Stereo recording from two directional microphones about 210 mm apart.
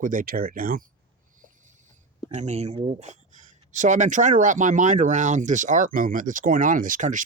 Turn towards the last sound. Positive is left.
turn(degrees=-35)  # may be behind; listen again after turning